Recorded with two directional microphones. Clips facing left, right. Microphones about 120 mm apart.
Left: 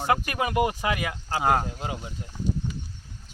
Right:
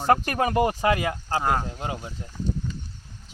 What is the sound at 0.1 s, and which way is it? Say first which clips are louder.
Speech: right 4 dB; 40° right (ahead or behind).